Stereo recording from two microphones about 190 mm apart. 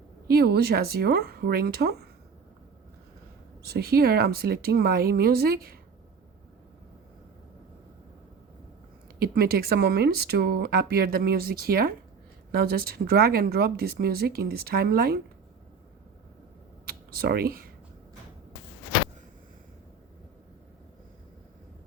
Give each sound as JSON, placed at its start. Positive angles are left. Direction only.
{"t": 0.3, "sound": "speech", "side_deg": -55}
{"t": 3.7, "sound": "speech", "side_deg": -55}
{"t": 9.1, "sound": "speech", "side_deg": -55}
{"t": 16.8, "sound": "computer keyboard", "side_deg": -50}